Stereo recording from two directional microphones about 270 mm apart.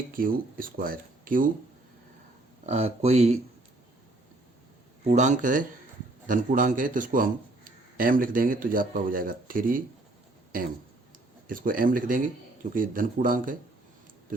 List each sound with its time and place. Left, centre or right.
0.1 s a man's voice: right
2.6 s speech: right
5.0 s a man's voice: right
11.4 s a man's voice: right